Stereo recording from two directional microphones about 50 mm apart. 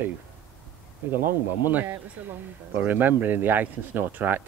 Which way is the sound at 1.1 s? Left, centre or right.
Right.